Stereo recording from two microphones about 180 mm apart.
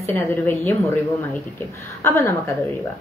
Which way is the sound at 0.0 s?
15° left (ahead or behind).